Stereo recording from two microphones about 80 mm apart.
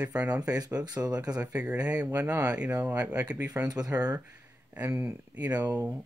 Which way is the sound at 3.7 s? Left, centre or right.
Right.